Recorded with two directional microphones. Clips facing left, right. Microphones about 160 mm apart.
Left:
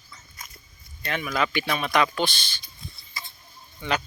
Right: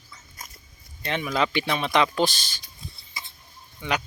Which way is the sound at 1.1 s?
25° right (ahead or behind).